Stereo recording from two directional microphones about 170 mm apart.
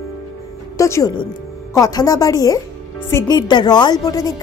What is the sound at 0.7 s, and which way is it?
A woman's voice, 15° left (ahead or behind).